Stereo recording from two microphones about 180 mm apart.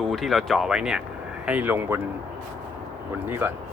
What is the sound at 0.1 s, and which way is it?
Speech, centre (ahead or behind).